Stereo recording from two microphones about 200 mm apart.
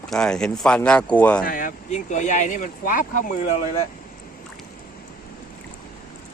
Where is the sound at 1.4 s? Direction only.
45° left (ahead or behind).